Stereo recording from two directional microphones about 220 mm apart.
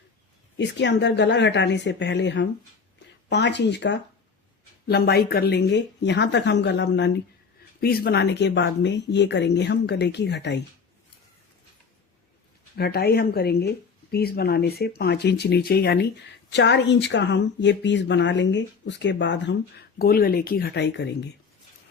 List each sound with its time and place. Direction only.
0.6 s a woman's voice: 50° left (ahead or behind)
12.7 s a woman's voice: 45° left (ahead or behind)